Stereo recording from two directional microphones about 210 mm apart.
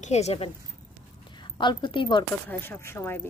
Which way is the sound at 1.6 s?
20° left (ahead or behind).